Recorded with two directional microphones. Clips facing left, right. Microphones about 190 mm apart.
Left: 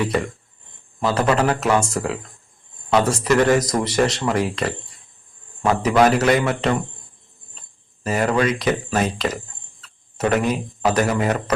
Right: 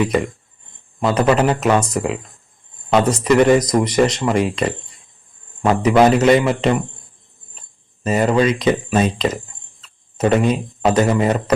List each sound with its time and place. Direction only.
0.0 s speech: 15° right (ahead or behind)
8.0 s speech: 20° right (ahead or behind)